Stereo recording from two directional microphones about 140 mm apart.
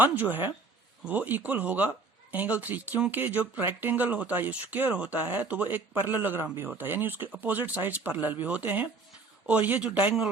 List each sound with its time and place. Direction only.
0.0 s speech: 10° right (ahead or behind)